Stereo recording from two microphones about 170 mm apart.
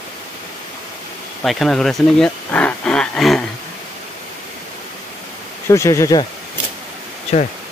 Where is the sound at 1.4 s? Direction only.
Centre (ahead or behind).